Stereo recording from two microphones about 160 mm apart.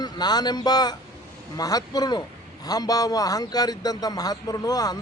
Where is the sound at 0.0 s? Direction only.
25° left (ahead or behind).